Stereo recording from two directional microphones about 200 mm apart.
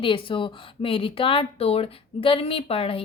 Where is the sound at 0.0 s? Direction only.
25° left (ahead or behind).